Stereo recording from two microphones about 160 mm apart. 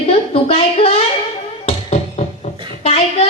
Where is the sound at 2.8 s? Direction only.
40° left (ahead or behind).